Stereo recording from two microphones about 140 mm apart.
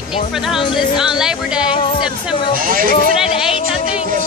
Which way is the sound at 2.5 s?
80° right.